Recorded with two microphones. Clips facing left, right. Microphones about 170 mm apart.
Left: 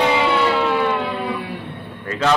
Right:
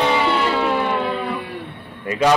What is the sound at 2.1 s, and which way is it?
Speech, 10° right (ahead or behind).